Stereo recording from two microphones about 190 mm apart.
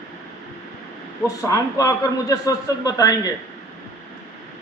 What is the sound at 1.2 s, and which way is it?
A man's voice, 15° left (ahead or behind).